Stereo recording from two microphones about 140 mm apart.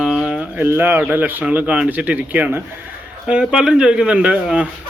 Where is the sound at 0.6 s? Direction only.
15° right (ahead or behind).